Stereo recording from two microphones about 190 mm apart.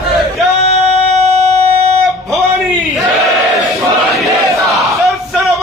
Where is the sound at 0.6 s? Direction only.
35° right (ahead or behind).